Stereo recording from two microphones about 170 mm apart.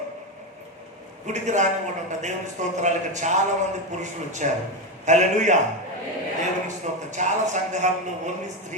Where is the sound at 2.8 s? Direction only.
45° right (ahead or behind).